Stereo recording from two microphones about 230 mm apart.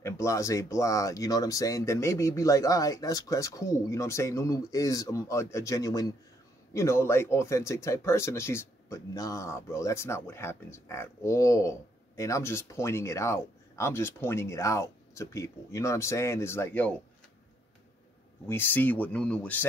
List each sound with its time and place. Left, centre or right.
0.0 s speech: centre
18.5 s speech: centre